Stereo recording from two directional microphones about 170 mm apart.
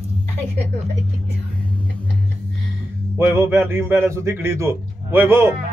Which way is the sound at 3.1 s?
15° right (ahead or behind).